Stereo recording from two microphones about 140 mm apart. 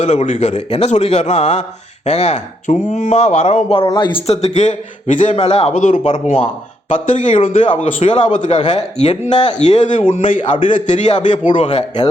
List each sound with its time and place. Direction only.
0.0 s speech: 50° left (ahead or behind)
3.8 s a man's voice: 35° left (ahead or behind)
4.3 s a man's voice: 50° left (ahead or behind)
5.3 s speech: 45° left (ahead or behind)
6.9 s a man's voice: 60° left (ahead or behind)
7.3 s a man's voice: 40° left (ahead or behind)
7.8 s speech: 50° left (ahead or behind)
8.3 s a man's voice: 65° left (ahead or behind)
10.0 s a man's voice: 40° left (ahead or behind)
10.3 s a man's voice: 65° left (ahead or behind)
11.4 s a man's voice: 40° left (ahead or behind)